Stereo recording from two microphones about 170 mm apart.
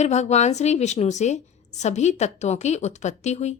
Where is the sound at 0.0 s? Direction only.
40° left (ahead or behind).